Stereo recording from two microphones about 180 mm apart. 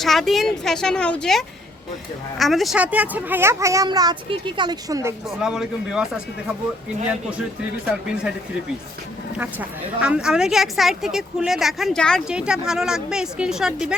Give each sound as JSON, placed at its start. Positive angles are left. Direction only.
{"t": 0.0, "sound": "speech", "side_deg": 0}
{"t": 5.4, "sound": "speech", "side_deg": -5}
{"t": 10.0, "sound": "speech", "side_deg": -5}